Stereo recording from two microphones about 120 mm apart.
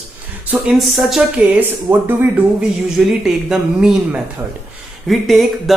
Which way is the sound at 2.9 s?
5° right (ahead or behind).